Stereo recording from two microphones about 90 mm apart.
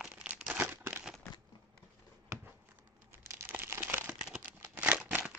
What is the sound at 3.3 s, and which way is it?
Crumpling, 25° right (ahead or behind).